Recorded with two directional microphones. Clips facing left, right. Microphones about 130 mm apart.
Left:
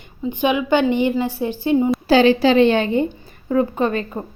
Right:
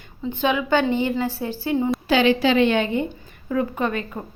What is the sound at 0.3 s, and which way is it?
A woman's voice, 15° left (ahead or behind).